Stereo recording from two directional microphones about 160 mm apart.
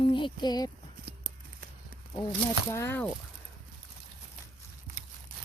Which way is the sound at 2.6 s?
15° left (ahead or behind).